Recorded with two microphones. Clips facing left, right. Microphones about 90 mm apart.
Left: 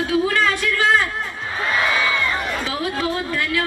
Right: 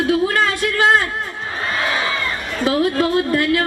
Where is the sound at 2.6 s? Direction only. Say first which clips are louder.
Right 6 dB; 50° right (ahead or behind).